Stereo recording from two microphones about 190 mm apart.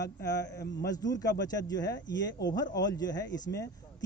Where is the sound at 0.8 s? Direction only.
20° left (ahead or behind).